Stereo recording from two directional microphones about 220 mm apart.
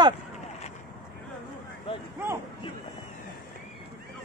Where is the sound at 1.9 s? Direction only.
25° left (ahead or behind).